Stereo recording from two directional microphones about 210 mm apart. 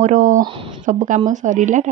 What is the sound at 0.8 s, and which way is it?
Speech, 35° right (ahead or behind).